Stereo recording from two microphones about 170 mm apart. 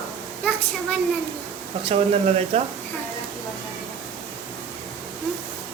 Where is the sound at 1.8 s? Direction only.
35° right (ahead or behind).